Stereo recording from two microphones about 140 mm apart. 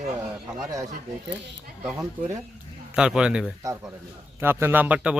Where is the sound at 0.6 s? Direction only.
20° right (ahead or behind).